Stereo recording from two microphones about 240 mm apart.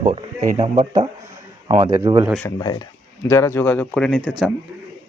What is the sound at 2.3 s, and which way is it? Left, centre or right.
Speech, centre.